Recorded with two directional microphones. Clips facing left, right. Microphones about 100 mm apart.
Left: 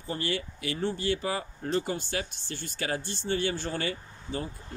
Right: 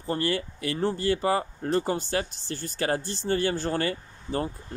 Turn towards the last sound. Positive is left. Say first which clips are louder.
# right 5 dB
turn(degrees=-45)  # may be behind; listen again after turning